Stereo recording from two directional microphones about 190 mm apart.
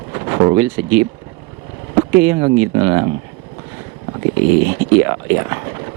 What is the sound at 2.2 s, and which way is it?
Speech, 15° right (ahead or behind).